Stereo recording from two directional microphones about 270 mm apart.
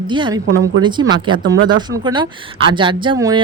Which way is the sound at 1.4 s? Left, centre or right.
Right.